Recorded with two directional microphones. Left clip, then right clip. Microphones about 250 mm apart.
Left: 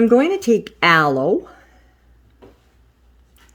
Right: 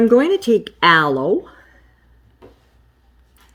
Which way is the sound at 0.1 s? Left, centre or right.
Left.